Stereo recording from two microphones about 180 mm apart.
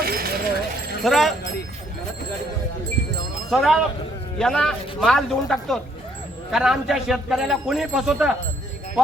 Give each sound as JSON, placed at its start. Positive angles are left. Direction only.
{"t": 0.0, "sound": "a sound", "side_deg": -55}
{"t": 1.0, "sound": "speech", "side_deg": 0}
{"t": 3.5, "sound": "speech", "side_deg": 0}